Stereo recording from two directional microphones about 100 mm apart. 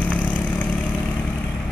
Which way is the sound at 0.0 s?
15° left (ahead or behind).